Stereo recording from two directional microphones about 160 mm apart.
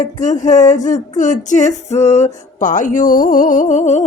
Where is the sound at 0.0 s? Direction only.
50° left (ahead or behind).